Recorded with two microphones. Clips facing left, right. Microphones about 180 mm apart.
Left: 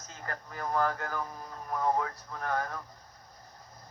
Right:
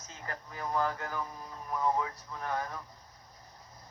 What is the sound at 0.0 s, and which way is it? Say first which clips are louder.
Speech: left 2 dB; 50° left (ahead or behind).